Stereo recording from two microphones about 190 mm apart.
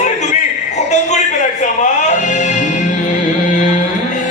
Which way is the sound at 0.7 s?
40° left (ahead or behind).